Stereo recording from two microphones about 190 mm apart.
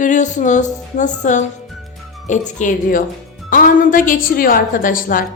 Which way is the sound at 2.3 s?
40° left (ahead or behind).